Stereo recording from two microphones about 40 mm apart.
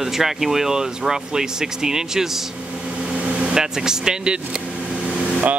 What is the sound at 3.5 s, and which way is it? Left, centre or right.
Speech, centre.